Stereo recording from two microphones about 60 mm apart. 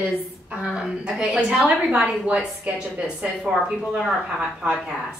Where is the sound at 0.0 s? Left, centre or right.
Centre.